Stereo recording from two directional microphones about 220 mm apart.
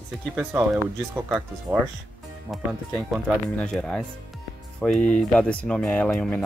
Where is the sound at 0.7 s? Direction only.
Centre (ahead or behind).